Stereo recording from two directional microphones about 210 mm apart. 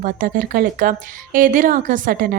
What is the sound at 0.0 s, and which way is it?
A woman's voice, 40° right (ahead or behind).